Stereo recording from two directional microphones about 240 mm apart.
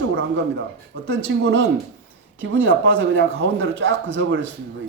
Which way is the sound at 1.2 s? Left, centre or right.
Right.